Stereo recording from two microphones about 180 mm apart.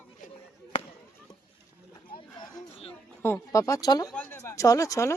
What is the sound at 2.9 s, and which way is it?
Speech, 10° left (ahead or behind).